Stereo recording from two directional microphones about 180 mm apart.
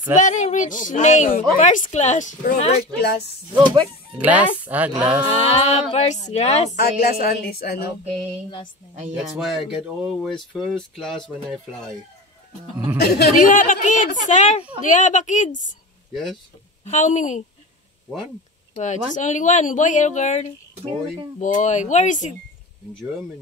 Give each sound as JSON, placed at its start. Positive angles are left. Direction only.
{"t": 0.1, "sound": "speech", "side_deg": 45}
{"t": 3.5, "sound": "speech", "side_deg": -25}
{"t": 4.2, "sound": "speech", "side_deg": -10}
{"t": 5.3, "sound": "speech", "side_deg": 35}
{"t": 6.8, "sound": "a woman's voice", "side_deg": 55}
{"t": 8.0, "sound": "mantra", "side_deg": -35}
{"t": 9.1, "sound": "speech", "side_deg": 0}
{"t": 13.0, "sound": "speech", "side_deg": 60}
{"t": 16.1, "sound": "speech", "side_deg": 0}
{"t": 16.8, "sound": "speech", "side_deg": 40}
{"t": 18.8, "sound": "speech", "side_deg": 40}